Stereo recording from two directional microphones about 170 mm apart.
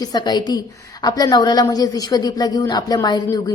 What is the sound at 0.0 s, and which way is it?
A woman's voice, 25° left (ahead or behind).